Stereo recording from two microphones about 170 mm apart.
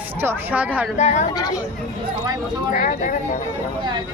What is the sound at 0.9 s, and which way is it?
Speech, 45° left (ahead or behind).